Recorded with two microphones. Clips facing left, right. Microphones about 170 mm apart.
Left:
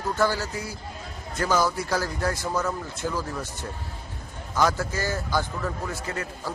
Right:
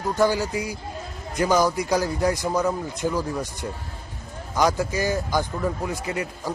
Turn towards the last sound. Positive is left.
turn(degrees=-15)  # may be behind; listen again after turning